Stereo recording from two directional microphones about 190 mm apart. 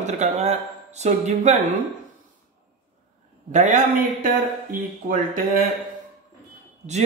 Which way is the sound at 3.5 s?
40° right (ahead or behind).